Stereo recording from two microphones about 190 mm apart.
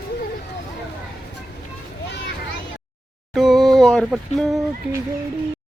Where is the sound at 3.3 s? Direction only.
Centre (ahead or behind).